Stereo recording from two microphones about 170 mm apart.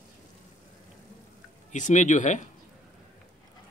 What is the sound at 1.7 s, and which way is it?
Speech, 45° left (ahead or behind).